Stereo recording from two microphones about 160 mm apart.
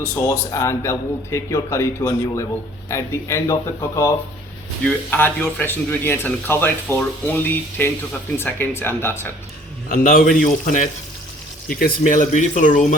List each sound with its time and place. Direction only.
0.0 s speech: 15° left (ahead or behind)
9.9 s a man's voice: 60° left (ahead or behind)